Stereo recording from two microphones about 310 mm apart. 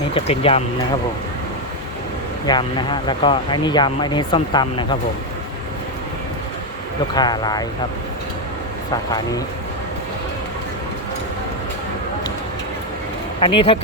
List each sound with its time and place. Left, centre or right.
0.1 s speech: centre
2.5 s speech: centre
7.1 s speech: centre
8.9 s speech: centre
13.4 s speech: centre